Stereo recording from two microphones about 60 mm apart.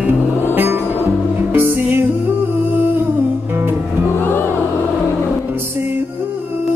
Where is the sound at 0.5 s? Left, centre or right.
Right.